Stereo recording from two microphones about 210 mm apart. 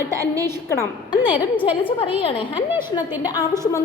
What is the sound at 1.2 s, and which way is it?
Speech, 10° right (ahead or behind).